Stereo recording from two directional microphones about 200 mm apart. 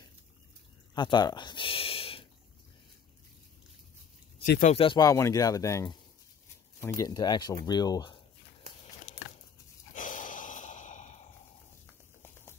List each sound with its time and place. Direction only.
0.9 s speech: 20° left (ahead or behind)
4.4 s speech: 40° left (ahead or behind)
4.7 s speech: 25° left (ahead or behind)
7.0 s speech: 20° left (ahead or behind)
9.9 s snort: 40° left (ahead or behind)
11.8 s a sound: 10° left (ahead or behind)